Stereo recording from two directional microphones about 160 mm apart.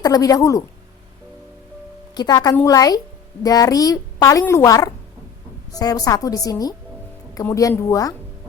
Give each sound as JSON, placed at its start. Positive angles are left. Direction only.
{"t": 0.0, "sound": "a child's voice", "side_deg": 20}
{"t": 2.1, "sound": "a child's voice", "side_deg": 25}